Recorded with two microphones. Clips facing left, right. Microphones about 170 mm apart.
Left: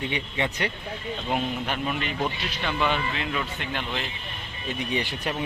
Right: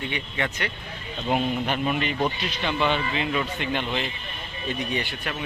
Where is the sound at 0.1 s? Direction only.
30° left (ahead or behind).